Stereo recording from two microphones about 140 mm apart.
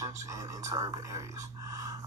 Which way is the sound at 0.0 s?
20° right (ahead or behind).